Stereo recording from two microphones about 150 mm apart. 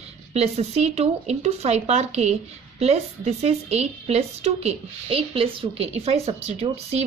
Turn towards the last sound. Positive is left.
turn(degrees=-45)  # may be behind; listen again after turning